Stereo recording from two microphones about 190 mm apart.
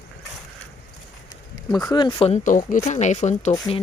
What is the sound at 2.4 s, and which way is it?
Speech, 45° left (ahead or behind).